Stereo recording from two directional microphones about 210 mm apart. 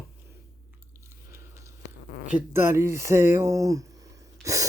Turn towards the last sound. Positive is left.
turn(degrees=-15)  # may be behind; listen again after turning